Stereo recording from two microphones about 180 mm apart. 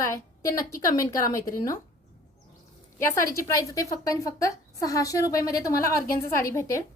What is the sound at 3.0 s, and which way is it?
A woman's voice, 15° left (ahead or behind).